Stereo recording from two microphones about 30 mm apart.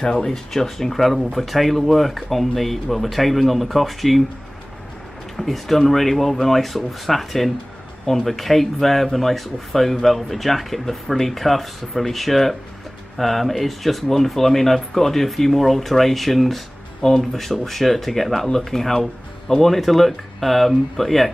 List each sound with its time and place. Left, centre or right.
0.0 s speech: left
0.3 s speech: centre
5.4 s speech: centre